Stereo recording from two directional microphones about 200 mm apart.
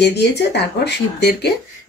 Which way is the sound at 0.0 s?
55° left (ahead or behind).